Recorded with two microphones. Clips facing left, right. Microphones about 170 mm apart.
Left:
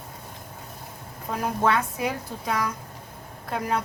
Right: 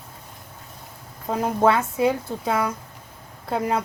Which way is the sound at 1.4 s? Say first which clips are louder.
Right 4 dB; 30° right (ahead or behind).